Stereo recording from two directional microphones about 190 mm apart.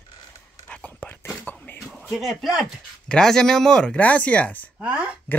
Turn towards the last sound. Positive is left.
turn(degrees=-5)  # may be behind; listen again after turning